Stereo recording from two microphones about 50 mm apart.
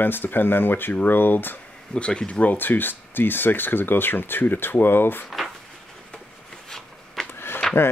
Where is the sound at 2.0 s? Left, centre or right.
Left.